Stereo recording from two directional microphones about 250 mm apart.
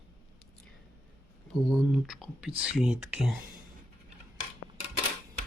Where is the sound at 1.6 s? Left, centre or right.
Centre.